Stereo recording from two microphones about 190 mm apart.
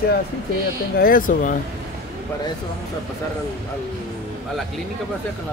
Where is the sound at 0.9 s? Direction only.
50° left (ahead or behind).